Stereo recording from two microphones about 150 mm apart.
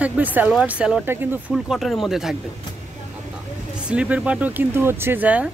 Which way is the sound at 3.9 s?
10° right (ahead or behind).